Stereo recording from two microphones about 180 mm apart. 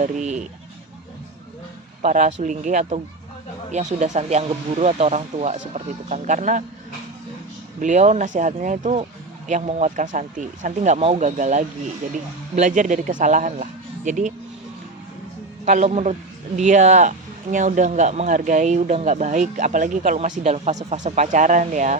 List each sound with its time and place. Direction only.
0.0 s speech: 40° right (ahead or behind)
2.0 s speech: 40° right (ahead or behind)
7.8 s speech: 40° right (ahead or behind)
15.6 s speech: 45° right (ahead or behind)